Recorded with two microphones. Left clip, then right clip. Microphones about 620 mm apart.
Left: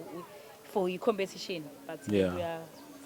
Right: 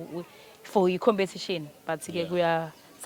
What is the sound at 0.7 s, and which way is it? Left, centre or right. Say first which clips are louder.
Speech: right 7 dB; right.